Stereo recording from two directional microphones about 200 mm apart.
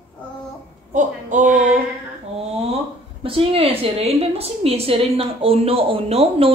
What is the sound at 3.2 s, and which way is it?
A woman's voice, 30° right (ahead or behind).